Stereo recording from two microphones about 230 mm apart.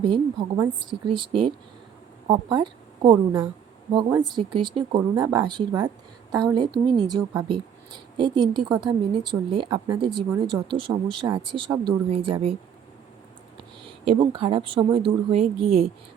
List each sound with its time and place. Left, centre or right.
0.0 s speech: right
2.2 s a woman's voice: right
4.5 s speech: right
13.8 s speech: right